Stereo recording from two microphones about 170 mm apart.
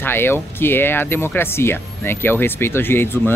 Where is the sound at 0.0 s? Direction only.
15° left (ahead or behind).